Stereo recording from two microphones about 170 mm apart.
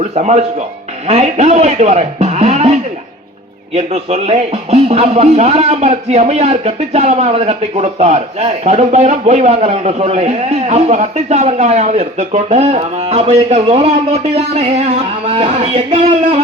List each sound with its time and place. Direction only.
0.2 s a man's voice: 40° right (ahead or behind)
3.8 s speech: 40° right (ahead or behind)